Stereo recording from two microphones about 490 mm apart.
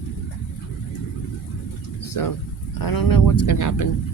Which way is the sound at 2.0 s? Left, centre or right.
Left.